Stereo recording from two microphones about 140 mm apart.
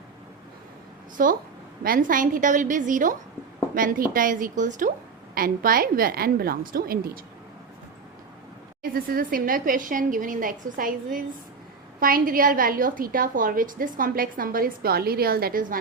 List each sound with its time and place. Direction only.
1.1 s a woman's voice: 75° right (ahead or behind)
3.8 s speech: 80° right
5.3 s a woman's voice: 90° right
8.8 s speech: 90° right
11.9 s a woman's voice: 90° right